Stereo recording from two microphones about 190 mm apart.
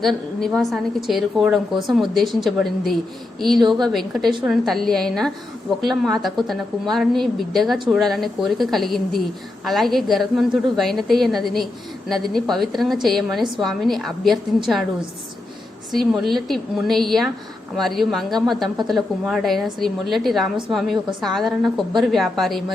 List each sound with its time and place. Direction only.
0.0 s a woman's voice: centre (ahead or behind)
15.9 s a woman's voice: centre (ahead or behind)